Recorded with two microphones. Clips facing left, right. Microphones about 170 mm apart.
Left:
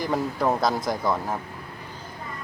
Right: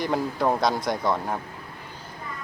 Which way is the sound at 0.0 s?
Centre (ahead or behind).